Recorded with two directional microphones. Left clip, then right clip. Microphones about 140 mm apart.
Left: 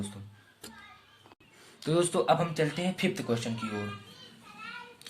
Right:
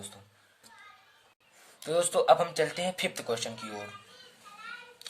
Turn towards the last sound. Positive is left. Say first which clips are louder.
# left 1 dB
turn(degrees=-40)  # may be behind; listen again after turning